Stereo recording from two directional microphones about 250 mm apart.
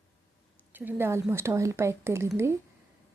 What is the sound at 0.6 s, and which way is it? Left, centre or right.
Speech, centre.